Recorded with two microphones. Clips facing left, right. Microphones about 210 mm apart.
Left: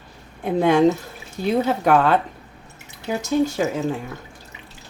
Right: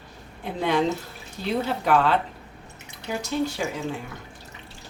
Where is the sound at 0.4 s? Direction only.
50° left (ahead or behind).